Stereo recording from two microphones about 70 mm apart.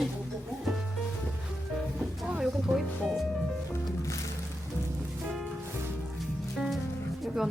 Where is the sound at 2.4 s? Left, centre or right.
Centre.